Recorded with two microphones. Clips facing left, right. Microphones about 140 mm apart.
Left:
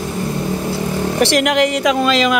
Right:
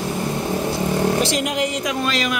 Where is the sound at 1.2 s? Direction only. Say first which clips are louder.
Left 7 dB; 70° left (ahead or behind); by 2.4 s 90° left.